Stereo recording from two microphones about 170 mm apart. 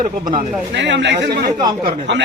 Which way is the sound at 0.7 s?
90° right.